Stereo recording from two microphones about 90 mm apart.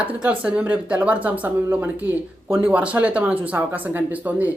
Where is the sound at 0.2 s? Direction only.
15° right (ahead or behind).